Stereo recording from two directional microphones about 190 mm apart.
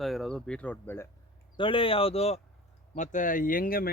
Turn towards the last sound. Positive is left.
turn(degrees=50)  # may be behind; listen again after turning